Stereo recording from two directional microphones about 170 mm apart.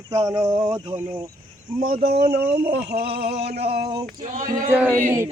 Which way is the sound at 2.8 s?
70° right (ahead or behind).